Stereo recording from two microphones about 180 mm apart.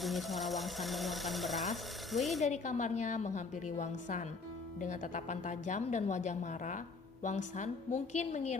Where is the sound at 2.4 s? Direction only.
40° left (ahead or behind).